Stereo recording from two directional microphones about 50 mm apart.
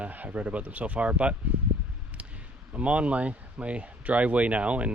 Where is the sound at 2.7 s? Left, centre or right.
Right.